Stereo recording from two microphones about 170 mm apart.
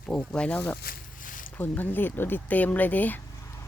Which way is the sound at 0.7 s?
60° left (ahead or behind).